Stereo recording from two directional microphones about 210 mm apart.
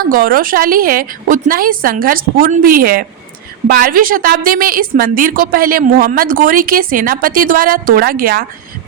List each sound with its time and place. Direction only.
0.1 s a woman's voice: 40° right (ahead or behind)